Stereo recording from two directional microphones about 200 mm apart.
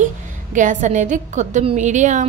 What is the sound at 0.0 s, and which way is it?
A woman's voice, 40° right (ahead or behind).